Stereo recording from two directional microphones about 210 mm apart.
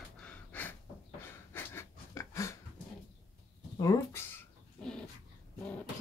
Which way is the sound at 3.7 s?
15° left (ahead or behind).